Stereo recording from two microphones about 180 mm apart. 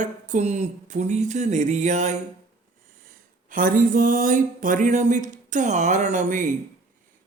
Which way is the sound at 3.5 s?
50° right (ahead or behind).